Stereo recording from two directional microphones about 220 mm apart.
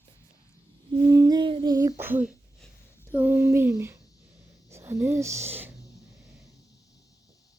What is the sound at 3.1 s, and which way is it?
Speech, 10° right (ahead or behind).